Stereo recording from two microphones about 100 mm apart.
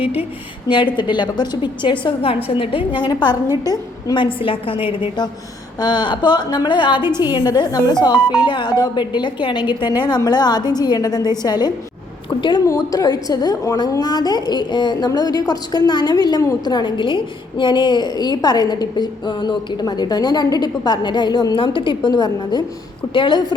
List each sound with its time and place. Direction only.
0.7 s a woman's voice: 50° left (ahead or behind)
5.8 s a woman's voice: 50° left (ahead or behind)
12.6 s a woman's voice: 35° left (ahead or behind)
16.6 s a woman's voice: 50° left (ahead or behind)